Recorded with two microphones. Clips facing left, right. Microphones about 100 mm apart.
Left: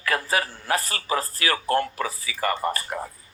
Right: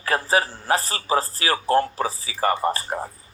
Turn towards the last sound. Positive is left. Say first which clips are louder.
# right 3 dB
turn(degrees=-35)  # may be behind; listen again after turning